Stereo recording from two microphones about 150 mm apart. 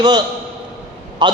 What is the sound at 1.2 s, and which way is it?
Speech, 30° right (ahead or behind).